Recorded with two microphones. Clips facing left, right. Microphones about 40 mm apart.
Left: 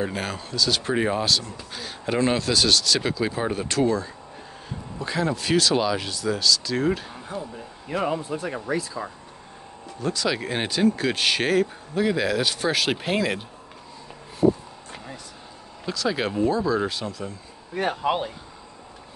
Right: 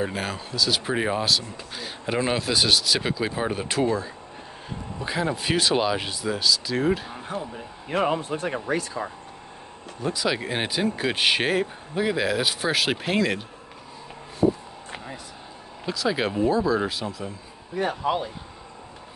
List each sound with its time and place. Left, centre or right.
0.0 s speech: centre
7.2 s speech: right
10.0 s speech: centre
15.8 s speech: centre
17.7 s speech: left